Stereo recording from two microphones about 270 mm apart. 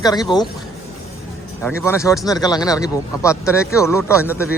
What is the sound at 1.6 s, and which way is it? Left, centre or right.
Speech, centre.